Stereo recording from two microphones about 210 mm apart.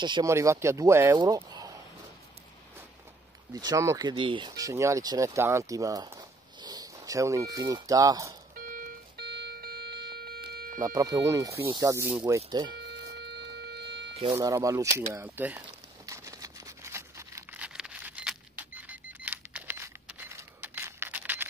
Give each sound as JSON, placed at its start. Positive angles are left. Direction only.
{"t": 0.0, "sound": "speech", "side_deg": -20}
{"t": 3.5, "sound": "speech", "side_deg": -15}
{"t": 8.5, "sound": "music", "side_deg": -40}
{"t": 10.8, "sound": "speech", "side_deg": -15}
{"t": 13.1, "sound": "a sound", "side_deg": -55}
{"t": 14.3, "sound": "speech", "side_deg": -15}
{"t": 16.1, "sound": "a sound", "side_deg": -15}